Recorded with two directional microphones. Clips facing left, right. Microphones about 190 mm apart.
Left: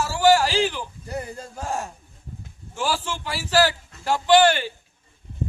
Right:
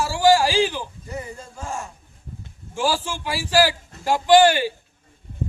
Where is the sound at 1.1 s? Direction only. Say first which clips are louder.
Left 3 dB; 65° left (ahead or behind).